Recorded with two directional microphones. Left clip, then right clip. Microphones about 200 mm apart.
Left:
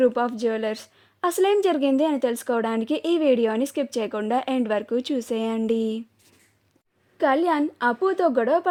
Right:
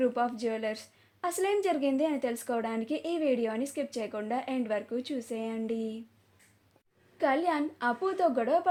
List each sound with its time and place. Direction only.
0.0 s a woman's voice: 50° left (ahead or behind)
7.2 s a woman's voice: 50° left (ahead or behind)